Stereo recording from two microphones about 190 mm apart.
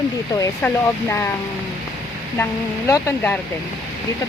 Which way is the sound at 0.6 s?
10° left (ahead or behind).